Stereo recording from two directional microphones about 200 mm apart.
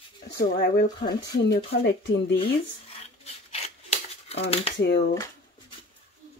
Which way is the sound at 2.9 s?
30° left (ahead or behind).